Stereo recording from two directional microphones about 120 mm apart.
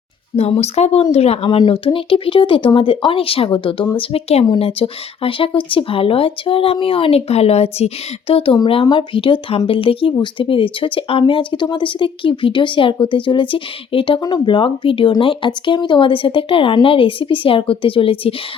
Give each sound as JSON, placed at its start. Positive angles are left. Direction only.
{"t": 0.3, "sound": "speech", "side_deg": 60}
{"t": 1.5, "sound": "speech", "side_deg": 40}
{"t": 8.5, "sound": "speech", "side_deg": 40}
{"t": 14.2, "sound": "speech", "side_deg": 35}